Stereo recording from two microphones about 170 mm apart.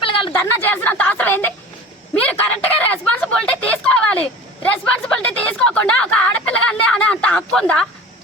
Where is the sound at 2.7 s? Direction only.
5° left (ahead or behind).